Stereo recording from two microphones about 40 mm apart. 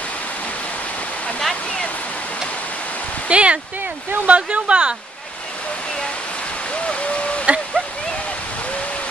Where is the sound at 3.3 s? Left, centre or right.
Right.